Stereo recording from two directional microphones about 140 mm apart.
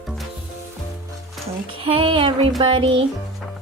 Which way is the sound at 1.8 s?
40° right (ahead or behind).